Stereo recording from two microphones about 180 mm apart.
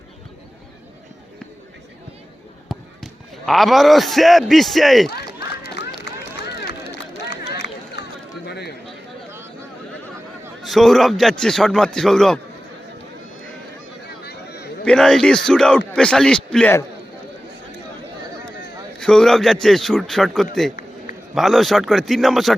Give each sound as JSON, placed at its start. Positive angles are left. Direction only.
{"t": 2.6, "sound": "speech", "side_deg": 0}
{"t": 5.5, "sound": "run", "side_deg": 65}
{"t": 7.2, "sound": "a sound", "side_deg": 70}
{"t": 10.6, "sound": "a man's voice", "side_deg": 0}
{"t": 14.3, "sound": "a sound", "side_deg": 65}
{"t": 14.8, "sound": "a man's voice", "side_deg": 5}
{"t": 18.9, "sound": "a man's voice", "side_deg": 5}